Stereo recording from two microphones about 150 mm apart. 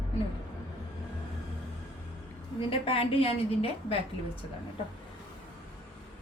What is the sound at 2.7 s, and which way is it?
A woman's voice, 40° left (ahead or behind).